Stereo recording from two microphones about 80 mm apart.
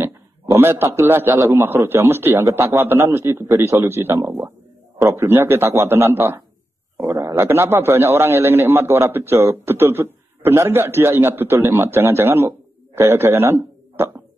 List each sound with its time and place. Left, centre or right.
0.0 s a man's voice: right